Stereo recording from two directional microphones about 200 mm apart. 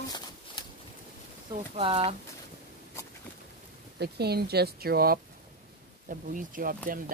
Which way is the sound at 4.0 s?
55° right (ahead or behind).